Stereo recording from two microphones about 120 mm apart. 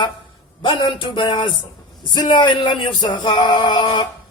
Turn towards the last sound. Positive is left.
turn(degrees=45)  # may be behind; listen again after turning